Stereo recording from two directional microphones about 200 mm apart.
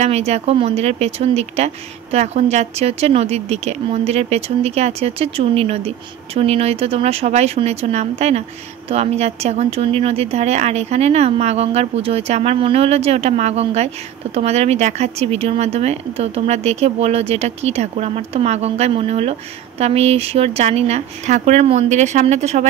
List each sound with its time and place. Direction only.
0.0 s speech: 30° right (ahead or behind)